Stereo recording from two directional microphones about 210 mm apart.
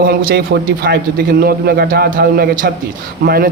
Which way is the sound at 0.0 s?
50° right (ahead or behind).